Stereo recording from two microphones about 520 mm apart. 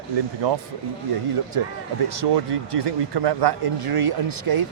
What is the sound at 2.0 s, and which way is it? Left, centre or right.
Speech, right.